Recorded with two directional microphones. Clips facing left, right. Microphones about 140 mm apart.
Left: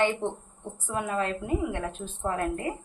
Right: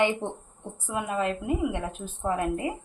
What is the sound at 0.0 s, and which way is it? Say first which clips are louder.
A woman's voice: even; 15° right (ahead or behind).